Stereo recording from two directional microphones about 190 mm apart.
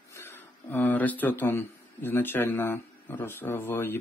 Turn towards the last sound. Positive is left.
turn(degrees=10)  # may be behind; listen again after turning